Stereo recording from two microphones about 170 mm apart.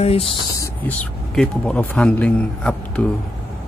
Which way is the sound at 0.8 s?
5° left (ahead or behind).